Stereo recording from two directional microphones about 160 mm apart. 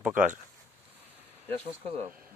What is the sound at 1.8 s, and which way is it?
Speech, 40° right (ahead or behind).